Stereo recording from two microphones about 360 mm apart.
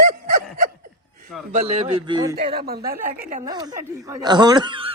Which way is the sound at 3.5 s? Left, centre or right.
Centre.